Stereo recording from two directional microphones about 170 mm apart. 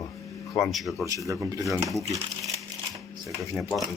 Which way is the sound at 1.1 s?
20° right (ahead or behind).